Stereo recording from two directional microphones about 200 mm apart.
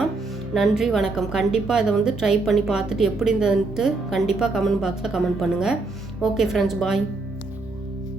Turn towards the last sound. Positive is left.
turn(degrees=0)  # may be behind; listen again after turning